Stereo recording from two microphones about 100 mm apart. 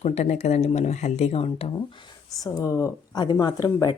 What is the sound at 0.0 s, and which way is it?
Speech, 90° left.